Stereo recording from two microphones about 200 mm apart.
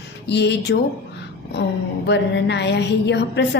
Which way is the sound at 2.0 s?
60° left (ahead or behind).